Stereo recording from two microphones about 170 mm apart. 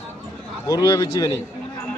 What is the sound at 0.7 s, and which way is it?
Speech, 20° left (ahead or behind).